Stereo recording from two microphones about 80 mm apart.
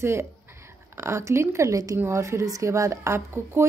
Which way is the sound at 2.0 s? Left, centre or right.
Right.